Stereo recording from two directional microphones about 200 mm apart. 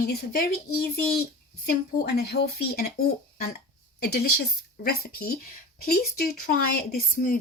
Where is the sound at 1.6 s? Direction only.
50° left (ahead or behind).